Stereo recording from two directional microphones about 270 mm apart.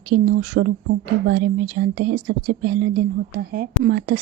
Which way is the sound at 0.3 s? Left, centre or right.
Right.